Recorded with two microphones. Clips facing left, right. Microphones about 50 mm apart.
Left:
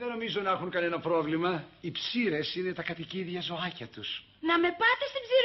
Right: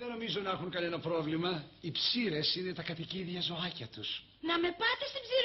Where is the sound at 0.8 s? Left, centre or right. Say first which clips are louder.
Left 5 dB; left.